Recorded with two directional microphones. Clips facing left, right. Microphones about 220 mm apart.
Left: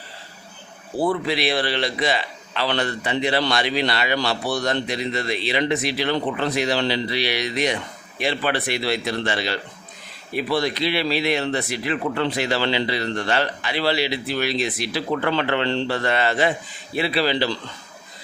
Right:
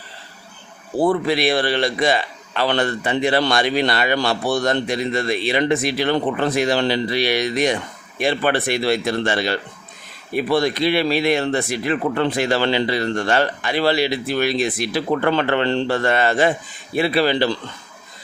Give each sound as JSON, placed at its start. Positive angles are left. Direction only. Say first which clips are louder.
{"t": 1.0, "sound": "speech", "louder": "right 4 dB", "side_deg": -50}